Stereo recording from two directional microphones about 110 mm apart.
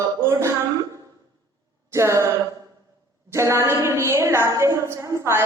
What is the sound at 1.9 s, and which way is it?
A woman's voice, 25° right (ahead or behind).